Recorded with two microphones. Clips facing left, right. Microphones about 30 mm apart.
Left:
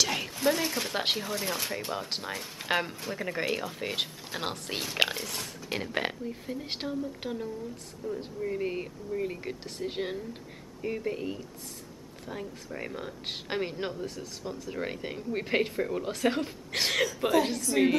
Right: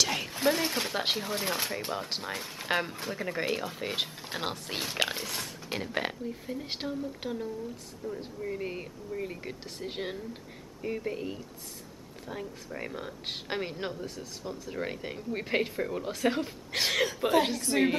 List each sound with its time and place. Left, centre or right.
0.0 s a sound: centre
0.6 s pig: centre
0.9 s speech: centre
1.4 s pig: centre
1.9 s speech: centre
5.1 s pig: centre
5.7 s speech: centre
17.7 s a woman's voice: right